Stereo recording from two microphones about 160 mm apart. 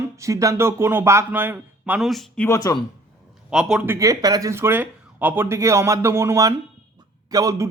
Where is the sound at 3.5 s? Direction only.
5° right (ahead or behind).